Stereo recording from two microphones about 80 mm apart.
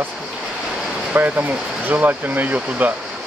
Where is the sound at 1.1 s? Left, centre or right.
Right.